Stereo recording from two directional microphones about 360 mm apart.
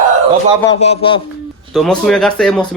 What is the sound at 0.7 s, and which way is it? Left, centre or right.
Speech, centre.